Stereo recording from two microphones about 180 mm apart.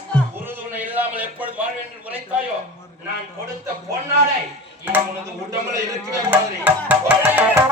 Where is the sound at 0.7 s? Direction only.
10° right (ahead or behind).